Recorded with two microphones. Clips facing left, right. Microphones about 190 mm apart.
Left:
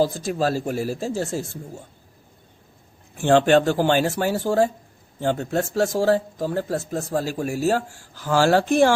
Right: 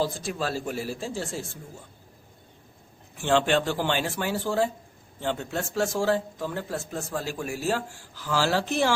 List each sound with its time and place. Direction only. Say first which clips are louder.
0.0 s speech: left 7 dB; 40° left (ahead or behind)
3.2 s speech: left 7 dB; 45° left (ahead or behind)